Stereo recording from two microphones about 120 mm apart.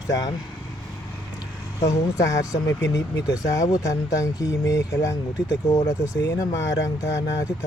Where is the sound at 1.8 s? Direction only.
30° left (ahead or behind).